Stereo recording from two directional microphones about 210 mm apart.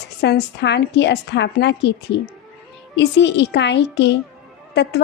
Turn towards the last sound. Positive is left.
turn(degrees=50)  # may be behind; listen again after turning